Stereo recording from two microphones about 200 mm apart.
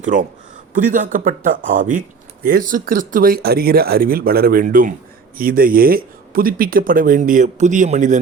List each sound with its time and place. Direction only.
0.0 s a man's voice: 40° right (ahead or behind)